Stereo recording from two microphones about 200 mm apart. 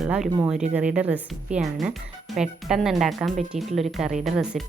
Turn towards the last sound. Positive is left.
turn(degrees=0)  # may be behind; listen again after turning